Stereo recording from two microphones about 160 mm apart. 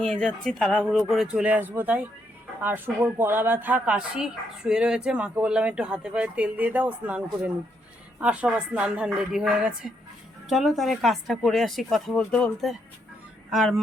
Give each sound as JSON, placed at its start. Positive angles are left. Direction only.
{"t": 0.2, "sound": "speech", "side_deg": 5}